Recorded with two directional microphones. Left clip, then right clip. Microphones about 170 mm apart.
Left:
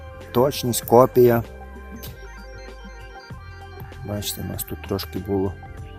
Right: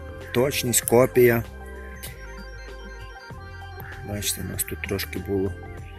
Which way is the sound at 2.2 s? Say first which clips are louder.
Even; centre (ahead or behind).